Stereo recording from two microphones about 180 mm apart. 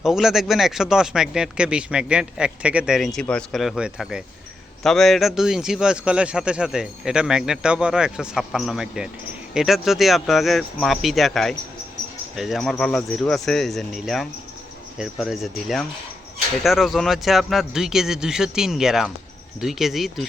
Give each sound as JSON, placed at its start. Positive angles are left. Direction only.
{"t": 0.0, "sound": "a man's voice", "side_deg": -5}